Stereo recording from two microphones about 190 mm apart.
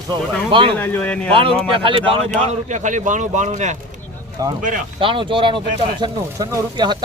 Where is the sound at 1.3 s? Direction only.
25° right (ahead or behind).